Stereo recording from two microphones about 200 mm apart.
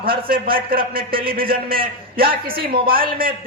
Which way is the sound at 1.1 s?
25° right (ahead or behind).